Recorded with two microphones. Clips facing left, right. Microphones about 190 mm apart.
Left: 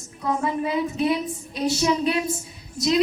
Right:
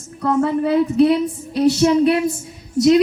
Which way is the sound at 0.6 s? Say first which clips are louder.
Right 9 dB; 70° right (ahead or behind).